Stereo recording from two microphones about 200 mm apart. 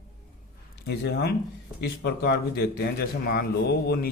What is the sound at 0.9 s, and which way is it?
A man's voice, 55° left (ahead or behind).